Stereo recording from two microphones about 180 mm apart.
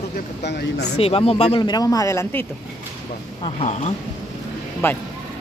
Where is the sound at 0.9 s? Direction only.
35° left (ahead or behind); by 2.4 s 15° left (ahead or behind).